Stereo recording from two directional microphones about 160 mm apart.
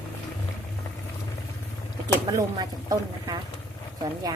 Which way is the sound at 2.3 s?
25° right (ahead or behind).